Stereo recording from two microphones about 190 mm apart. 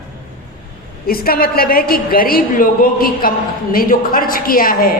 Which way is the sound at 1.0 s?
50° left (ahead or behind).